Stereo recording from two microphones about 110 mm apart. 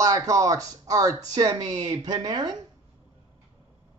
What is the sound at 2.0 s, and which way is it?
Speech, 40° right (ahead or behind).